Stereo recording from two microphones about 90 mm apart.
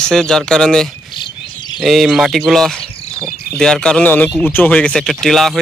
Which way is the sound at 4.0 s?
20° left (ahead or behind).